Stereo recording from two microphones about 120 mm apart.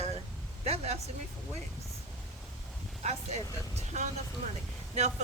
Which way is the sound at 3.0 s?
70° right (ahead or behind).